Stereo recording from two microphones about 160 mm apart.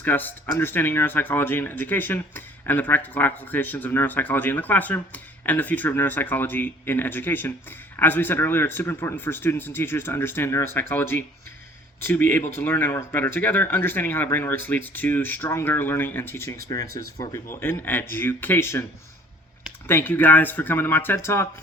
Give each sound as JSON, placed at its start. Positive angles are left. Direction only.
{"t": 0.0, "sound": "speech", "side_deg": 10}
{"t": 19.9, "sound": "speech", "side_deg": 10}